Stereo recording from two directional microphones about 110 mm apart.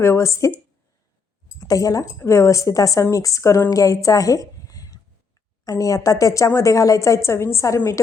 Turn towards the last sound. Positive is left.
turn(degrees=25)  # may be behind; listen again after turning